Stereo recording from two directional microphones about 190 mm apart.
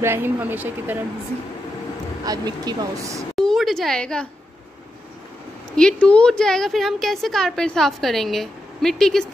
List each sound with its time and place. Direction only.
0.0 s a woman's voice: 10° right (ahead or behind)
2.2 s speech: 20° right (ahead or behind)
3.3 s a woman's voice: centre (ahead or behind)
5.8 s a woman's voice: 5° left (ahead or behind)